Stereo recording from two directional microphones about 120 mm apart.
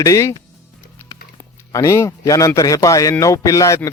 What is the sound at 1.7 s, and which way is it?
Speech, 25° left (ahead or behind).